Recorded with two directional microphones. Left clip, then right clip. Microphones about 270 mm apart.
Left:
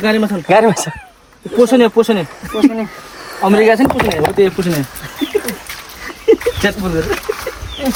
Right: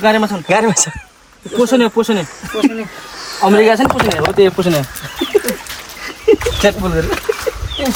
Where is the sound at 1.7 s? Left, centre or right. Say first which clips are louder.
Left 2 dB; centre.